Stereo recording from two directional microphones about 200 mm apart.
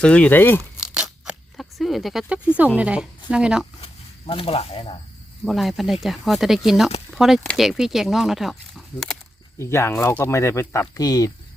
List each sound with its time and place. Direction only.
0.0 s speech: 5° left (ahead or behind)
0.9 s a sound: 5° right (ahead or behind)
2.7 s speech: 5° right (ahead or behind)
4.3 s speech: 30° left (ahead or behind)
5.5 s speech: centre (ahead or behind)
9.6 s speech: 15° left (ahead or behind)